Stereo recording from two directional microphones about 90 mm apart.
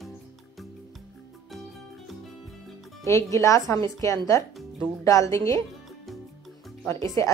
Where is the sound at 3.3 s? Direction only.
35° left (ahead or behind).